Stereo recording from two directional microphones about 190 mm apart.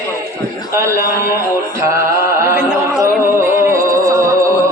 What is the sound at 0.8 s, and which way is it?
Speech, 15° right (ahead or behind).